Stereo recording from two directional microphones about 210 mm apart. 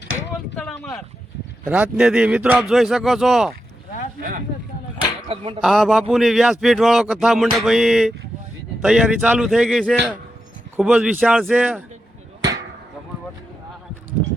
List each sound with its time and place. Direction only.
0.5 s boat: 5° left (ahead or behind)
1.6 s a man's voice: 5° right (ahead or behind)
4.2 s speech: 40° right (ahead or behind)
5.3 s speech: 25° right (ahead or behind)
5.5 s a man's voice: centre (ahead or behind)